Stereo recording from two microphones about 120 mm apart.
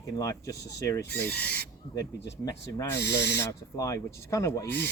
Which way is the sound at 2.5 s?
30° left (ahead or behind).